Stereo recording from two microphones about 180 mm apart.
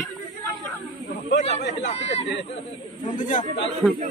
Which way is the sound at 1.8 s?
40° left (ahead or behind).